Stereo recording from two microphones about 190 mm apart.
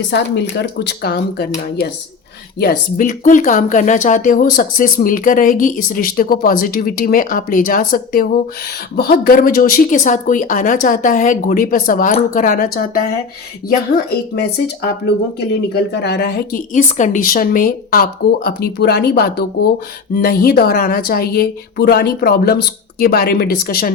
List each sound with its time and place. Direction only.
0.1 s a woman's voice: 65° left (ahead or behind)
2.6 s speech: 50° left (ahead or behind)
13.9 s a woman's voice: 55° left (ahead or behind)
16.7 s speech: 40° left (ahead or behind)